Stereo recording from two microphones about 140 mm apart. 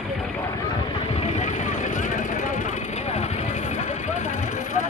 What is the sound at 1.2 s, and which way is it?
Vehicle, 60° left (ahead or behind).